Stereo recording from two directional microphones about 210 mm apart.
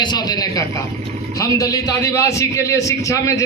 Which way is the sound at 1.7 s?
15° left (ahead or behind).